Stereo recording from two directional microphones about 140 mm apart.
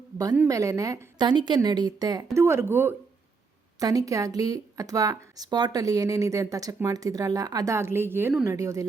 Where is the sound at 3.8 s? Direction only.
25° right (ahead or behind).